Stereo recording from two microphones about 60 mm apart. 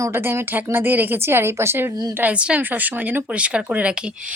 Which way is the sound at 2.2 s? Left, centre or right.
Right.